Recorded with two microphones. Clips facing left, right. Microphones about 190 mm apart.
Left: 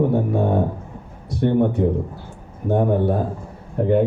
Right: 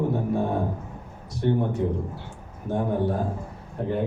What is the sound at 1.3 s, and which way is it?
A man's voice, 60° left (ahead or behind).